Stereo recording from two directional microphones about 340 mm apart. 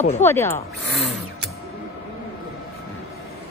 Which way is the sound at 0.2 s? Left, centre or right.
Centre.